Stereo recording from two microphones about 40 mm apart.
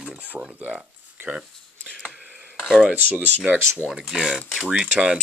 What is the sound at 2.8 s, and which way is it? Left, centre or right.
Speech, right.